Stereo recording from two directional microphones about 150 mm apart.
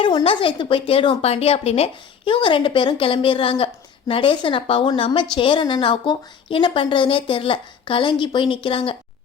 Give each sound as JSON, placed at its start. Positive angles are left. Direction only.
{"t": 0.0, "sound": "a woman's voice", "side_deg": 30}